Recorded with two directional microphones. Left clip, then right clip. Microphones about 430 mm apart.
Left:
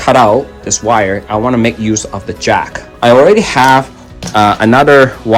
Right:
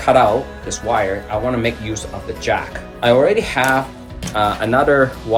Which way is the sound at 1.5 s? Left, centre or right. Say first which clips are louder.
Left 8 dB; centre.